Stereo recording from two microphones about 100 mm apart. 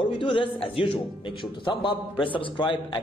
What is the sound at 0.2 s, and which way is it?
A man's voice, 60° left (ahead or behind).